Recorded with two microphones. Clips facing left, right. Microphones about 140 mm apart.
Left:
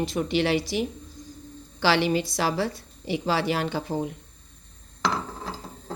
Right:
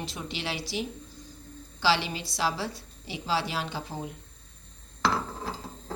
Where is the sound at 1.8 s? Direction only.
60° left (ahead or behind).